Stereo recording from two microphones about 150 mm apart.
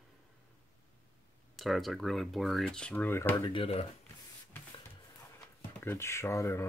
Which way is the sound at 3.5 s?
40° left (ahead or behind).